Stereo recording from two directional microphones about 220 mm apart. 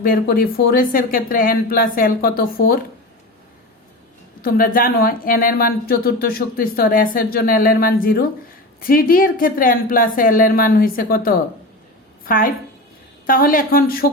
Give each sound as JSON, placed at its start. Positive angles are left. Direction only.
{"t": 0.0, "sound": "speech", "side_deg": 45}
{"t": 4.4, "sound": "speech", "side_deg": 40}